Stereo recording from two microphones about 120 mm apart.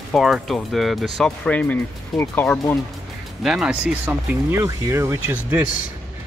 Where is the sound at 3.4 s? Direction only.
5° right (ahead or behind); by 5.4 s 20° right (ahead or behind).